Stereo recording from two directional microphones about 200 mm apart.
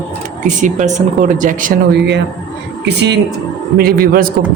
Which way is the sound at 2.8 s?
60° right (ahead or behind).